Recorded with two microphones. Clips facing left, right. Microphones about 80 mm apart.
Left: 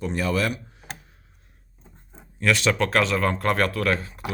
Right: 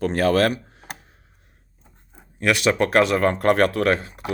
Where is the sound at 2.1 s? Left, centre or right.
Centre.